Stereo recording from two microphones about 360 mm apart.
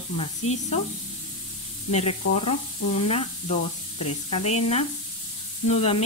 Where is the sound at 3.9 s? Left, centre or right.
Left.